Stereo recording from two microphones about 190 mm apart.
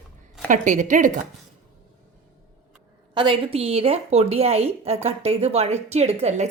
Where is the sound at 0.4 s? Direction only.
40° right (ahead or behind).